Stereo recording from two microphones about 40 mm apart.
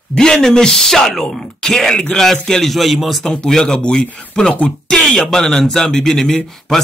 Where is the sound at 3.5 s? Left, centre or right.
Centre.